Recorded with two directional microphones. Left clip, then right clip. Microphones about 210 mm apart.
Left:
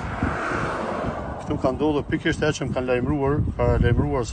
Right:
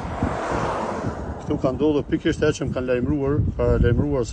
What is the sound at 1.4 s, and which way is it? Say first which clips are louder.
Speech: right 2 dB; 15° right (ahead or behind).